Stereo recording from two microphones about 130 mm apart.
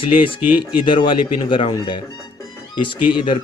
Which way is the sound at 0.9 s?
40° left (ahead or behind).